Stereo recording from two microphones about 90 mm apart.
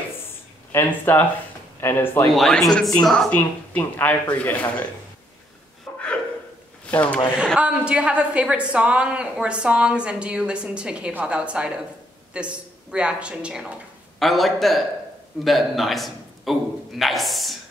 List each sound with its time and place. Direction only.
0.7 s speech: 25° left (ahead or behind)
2.3 s speech: centre (ahead or behind); by 4.8 s 15° left (ahead or behind)
5.9 s a sound: 15° left (ahead or behind)
6.9 s speech: 15° left (ahead or behind)
7.5 s a woman's voice: 15° right (ahead or behind)
14.2 s a man's voice: centre (ahead or behind)